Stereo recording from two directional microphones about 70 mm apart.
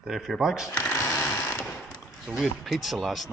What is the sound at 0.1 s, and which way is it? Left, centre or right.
Speech, centre.